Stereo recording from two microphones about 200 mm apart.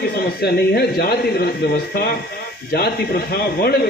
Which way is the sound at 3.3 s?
50° left (ahead or behind).